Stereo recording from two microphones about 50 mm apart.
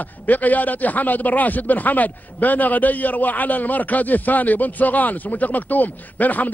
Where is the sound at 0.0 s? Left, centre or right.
Left.